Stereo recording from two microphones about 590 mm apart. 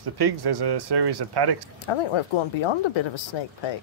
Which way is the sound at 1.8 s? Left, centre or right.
Left.